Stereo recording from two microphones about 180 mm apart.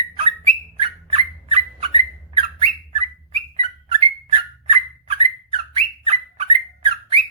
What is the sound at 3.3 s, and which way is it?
Bird, 35° right (ahead or behind).